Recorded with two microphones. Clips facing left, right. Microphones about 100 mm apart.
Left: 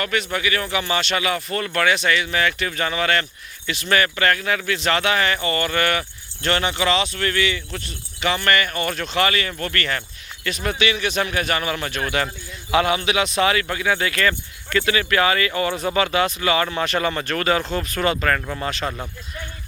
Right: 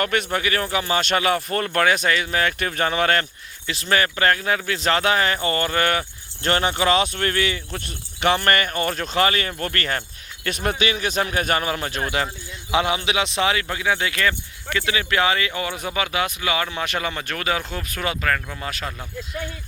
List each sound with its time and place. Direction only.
0.0 s speech: 50° right (ahead or behind); by 1.0 s 35° right (ahead or behind)
1.0 s speech: 45° right (ahead or behind)
3.7 s speech: 30° right (ahead or behind)
7.9 s speech: 50° right (ahead or behind); by 18.7 s 5° left (ahead or behind)